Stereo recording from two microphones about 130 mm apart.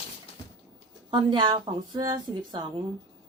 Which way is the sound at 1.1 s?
40° right (ahead or behind).